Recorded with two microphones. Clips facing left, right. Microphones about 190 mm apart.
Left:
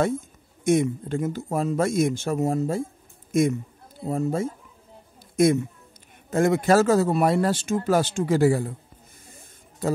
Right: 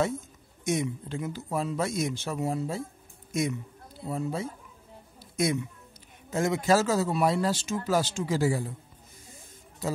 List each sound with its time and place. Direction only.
0.7 s a man's voice: 55° left (ahead or behind)